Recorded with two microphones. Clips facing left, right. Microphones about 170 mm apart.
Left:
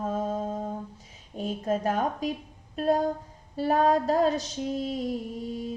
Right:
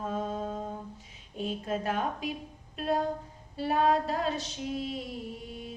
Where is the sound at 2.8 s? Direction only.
40° left (ahead or behind).